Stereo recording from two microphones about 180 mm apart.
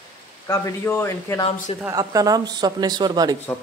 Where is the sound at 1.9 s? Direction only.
20° right (ahead or behind).